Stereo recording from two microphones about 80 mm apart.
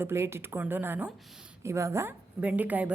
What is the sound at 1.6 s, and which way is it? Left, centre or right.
Speech, right.